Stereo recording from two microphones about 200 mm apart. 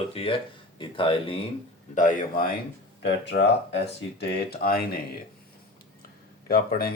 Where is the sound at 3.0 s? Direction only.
60° left (ahead or behind).